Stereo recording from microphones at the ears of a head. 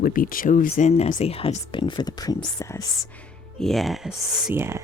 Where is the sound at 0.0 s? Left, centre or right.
Left.